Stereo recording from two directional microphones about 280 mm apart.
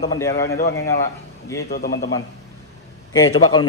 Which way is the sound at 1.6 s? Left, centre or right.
Left.